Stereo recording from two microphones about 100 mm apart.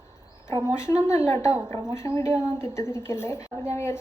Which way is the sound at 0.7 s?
30° left (ahead or behind).